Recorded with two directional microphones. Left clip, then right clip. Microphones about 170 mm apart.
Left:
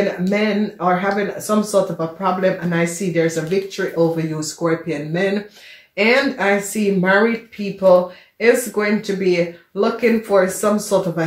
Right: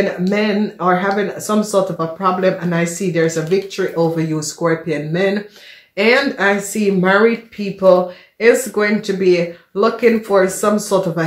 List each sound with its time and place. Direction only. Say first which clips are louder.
0.3 s speech: right 2 dB; 45° right (ahead or behind)